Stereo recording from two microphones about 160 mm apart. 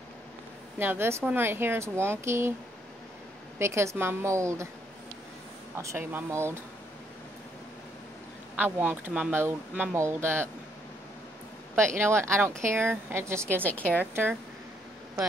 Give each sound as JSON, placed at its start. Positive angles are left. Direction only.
{"t": 0.7, "sound": "speech", "side_deg": -15}
{"t": 3.5, "sound": "speech", "side_deg": -15}
{"t": 5.8, "sound": "speech", "side_deg": -15}
{"t": 8.5, "sound": "speech", "side_deg": -15}
{"t": 11.7, "sound": "speech", "side_deg": -15}
{"t": 13.7, "sound": "a woman's voice", "side_deg": 10}